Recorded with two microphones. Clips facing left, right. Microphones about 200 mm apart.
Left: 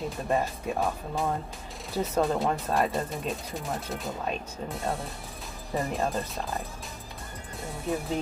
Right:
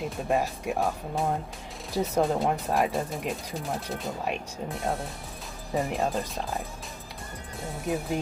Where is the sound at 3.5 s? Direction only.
Centre (ahead or behind).